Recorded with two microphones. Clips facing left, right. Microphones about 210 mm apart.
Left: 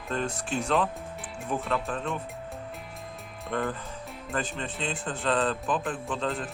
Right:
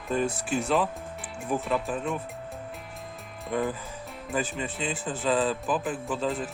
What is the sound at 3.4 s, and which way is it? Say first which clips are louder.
A man's voice: right 2 dB; centre (ahead or behind).